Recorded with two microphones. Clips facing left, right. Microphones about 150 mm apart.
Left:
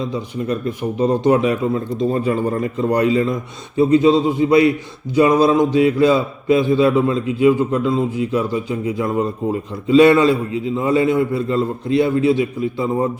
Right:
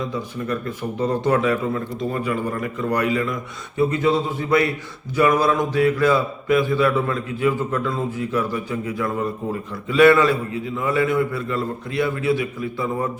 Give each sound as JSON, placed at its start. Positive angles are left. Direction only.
{"t": 0.1, "sound": "speech", "side_deg": 20}